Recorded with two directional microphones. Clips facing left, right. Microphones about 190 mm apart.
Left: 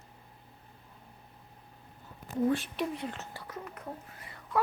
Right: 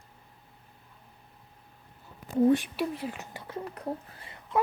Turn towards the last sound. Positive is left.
turn(degrees=-25)  # may be behind; listen again after turning